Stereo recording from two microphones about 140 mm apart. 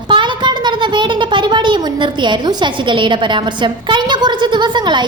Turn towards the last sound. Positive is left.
turn(degrees=-30)  # may be behind; listen again after turning